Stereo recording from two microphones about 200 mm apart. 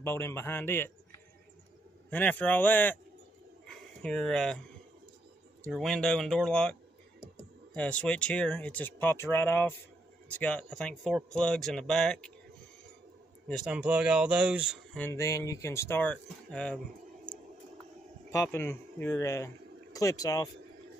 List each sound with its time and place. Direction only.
0.0 s speech: 15° left (ahead or behind)
2.0 s speech: 10° left (ahead or behind)
3.6 s a sound: 5° left (ahead or behind)
5.7 s speech: centre (ahead or behind)
13.5 s speech: centre (ahead or behind)
15.0 s speech: 10° left (ahead or behind)
18.3 s speech: 10° left (ahead or behind)